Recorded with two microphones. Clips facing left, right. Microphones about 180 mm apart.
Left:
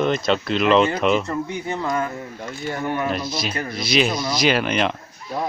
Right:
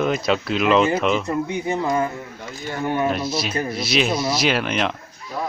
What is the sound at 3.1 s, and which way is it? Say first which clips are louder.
Speech: right 2 dB; 5° right (ahead or behind).